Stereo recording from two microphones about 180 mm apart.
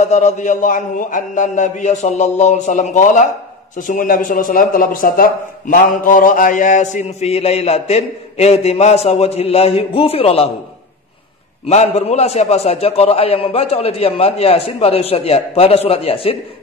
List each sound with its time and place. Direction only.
0.0 s a man's voice: 40° left (ahead or behind)
11.7 s a man's voice: 40° left (ahead or behind)